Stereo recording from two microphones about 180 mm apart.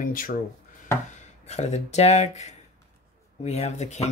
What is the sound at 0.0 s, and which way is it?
Speech, 50° left (ahead or behind).